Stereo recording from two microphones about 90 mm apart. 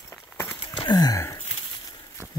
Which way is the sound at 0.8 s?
45° left (ahead or behind).